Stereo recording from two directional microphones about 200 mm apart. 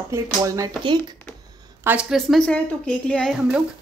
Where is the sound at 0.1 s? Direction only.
15° right (ahead or behind).